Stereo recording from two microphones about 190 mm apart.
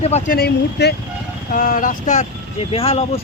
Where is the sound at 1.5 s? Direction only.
45° left (ahead or behind).